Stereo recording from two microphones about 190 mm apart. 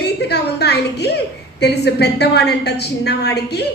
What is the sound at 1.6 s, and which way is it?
A woman's voice, 60° left (ahead or behind).